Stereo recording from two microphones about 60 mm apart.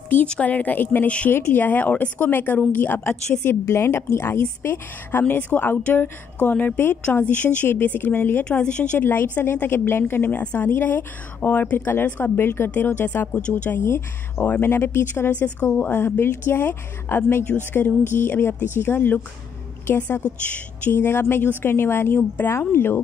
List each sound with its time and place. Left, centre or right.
0.3 s speech: left
5.3 s a woman's voice: left
8.5 s speech: centre
9.0 s a woman's voice: left
10.4 s speech: left
10.7 s a woman's voice: left
15.7 s a woman's voice: left
20.9 s a woman's voice: left